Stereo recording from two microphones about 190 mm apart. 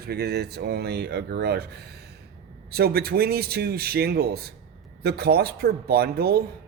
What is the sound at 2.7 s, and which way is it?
Speech, 55° right (ahead or behind).